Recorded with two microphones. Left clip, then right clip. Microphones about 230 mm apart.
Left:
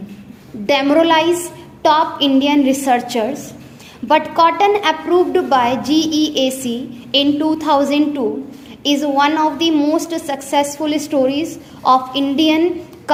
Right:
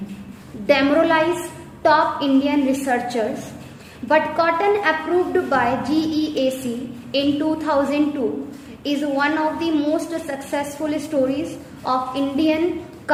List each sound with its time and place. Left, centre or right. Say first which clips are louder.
0.7 s a woman's voice: left 3 dB; left